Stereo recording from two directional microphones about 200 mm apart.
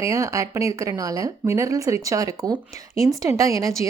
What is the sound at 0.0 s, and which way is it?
A woman's voice, 15° right (ahead or behind).